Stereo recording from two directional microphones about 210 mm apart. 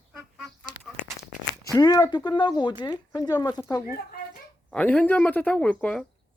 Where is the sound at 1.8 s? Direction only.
15° left (ahead or behind).